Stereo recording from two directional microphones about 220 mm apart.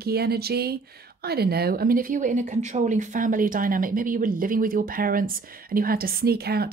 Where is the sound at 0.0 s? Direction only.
45° right (ahead or behind).